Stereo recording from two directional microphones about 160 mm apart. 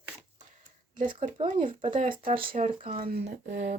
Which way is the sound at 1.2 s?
50° right (ahead or behind).